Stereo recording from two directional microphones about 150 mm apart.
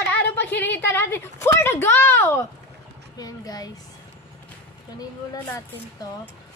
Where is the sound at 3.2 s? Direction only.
25° left (ahead or behind).